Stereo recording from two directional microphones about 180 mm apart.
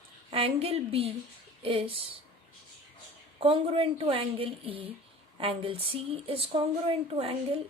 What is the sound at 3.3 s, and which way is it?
Speech, 30° right (ahead or behind).